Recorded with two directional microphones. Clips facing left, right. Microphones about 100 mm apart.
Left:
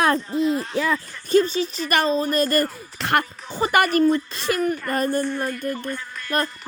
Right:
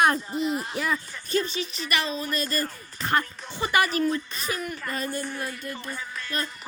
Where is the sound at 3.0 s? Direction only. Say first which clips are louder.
Left 4 dB; 80° left.